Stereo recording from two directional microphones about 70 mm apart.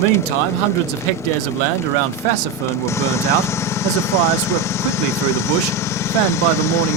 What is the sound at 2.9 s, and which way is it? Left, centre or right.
Speech, left.